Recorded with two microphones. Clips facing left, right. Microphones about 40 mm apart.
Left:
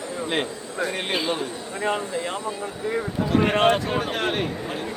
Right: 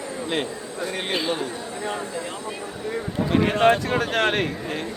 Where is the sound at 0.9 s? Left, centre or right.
Centre.